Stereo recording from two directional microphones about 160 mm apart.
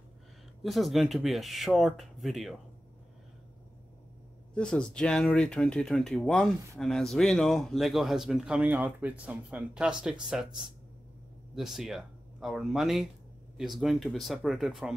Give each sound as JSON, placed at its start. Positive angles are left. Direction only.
{"t": 0.6, "sound": "speech", "side_deg": 0}
{"t": 4.6, "sound": "speech", "side_deg": 5}
{"t": 11.5, "sound": "speech", "side_deg": 0}